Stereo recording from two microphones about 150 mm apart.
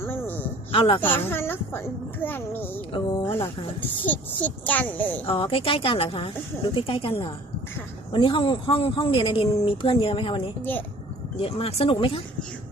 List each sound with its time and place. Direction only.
0.0 s a sound: 15° left (ahead or behind)
0.7 s speech: 35° left (ahead or behind)
1.0 s a child's voice: 15° left (ahead or behind)
5.2 s speech: 35° left (ahead or behind)
10.6 s a child's voice: 10° left (ahead or behind)
11.3 s speech: 40° left (ahead or behind)